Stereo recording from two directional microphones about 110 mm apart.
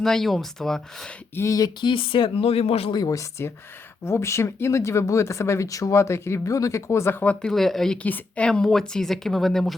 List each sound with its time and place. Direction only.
0.0 s a woman's voice: 5° left (ahead or behind)
1.4 s speech: 30° left (ahead or behind)
1.9 s speech: 50° left (ahead or behind)
2.9 s speech: 35° left (ahead or behind); by 7.3 s 20° left (ahead or behind)
7.4 s a woman's voice: centre (ahead or behind)